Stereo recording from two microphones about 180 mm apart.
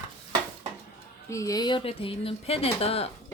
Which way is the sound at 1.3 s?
20° left (ahead or behind).